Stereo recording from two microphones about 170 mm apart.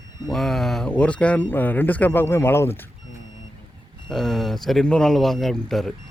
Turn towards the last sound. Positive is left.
turn(degrees=0)  # may be behind; listen again after turning